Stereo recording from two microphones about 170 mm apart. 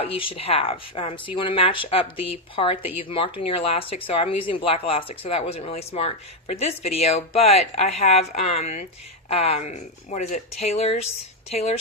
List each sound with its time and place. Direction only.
0.0 s speech: 30° left (ahead or behind)